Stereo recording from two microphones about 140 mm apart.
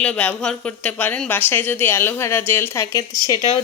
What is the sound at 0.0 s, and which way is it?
A woman's voice, 10° left (ahead or behind).